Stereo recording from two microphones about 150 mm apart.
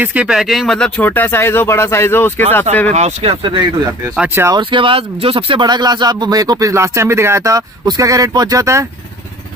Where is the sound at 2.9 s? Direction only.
45° right (ahead or behind).